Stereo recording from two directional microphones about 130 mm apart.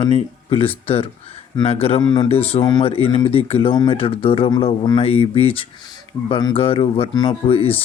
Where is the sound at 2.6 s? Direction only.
30° left (ahead or behind).